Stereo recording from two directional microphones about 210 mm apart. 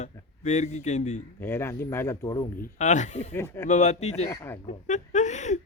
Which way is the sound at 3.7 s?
35° left (ahead or behind).